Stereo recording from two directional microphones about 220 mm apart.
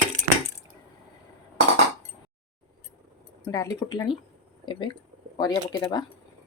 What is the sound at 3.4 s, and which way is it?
Speech, 15° left (ahead or behind).